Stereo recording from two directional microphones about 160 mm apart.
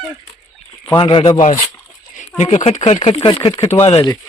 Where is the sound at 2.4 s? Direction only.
40° left (ahead or behind).